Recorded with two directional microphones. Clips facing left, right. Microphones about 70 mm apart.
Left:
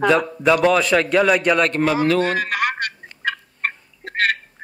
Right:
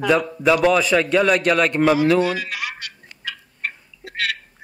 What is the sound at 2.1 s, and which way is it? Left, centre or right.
Turkey, left.